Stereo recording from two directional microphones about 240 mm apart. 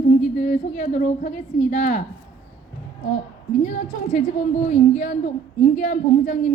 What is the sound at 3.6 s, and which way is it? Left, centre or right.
A woman's voice, left.